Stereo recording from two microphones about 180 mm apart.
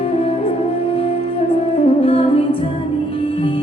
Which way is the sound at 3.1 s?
30° left (ahead or behind).